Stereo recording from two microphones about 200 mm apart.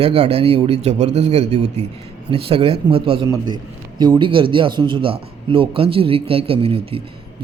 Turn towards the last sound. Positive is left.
turn(degrees=-25)  # may be behind; listen again after turning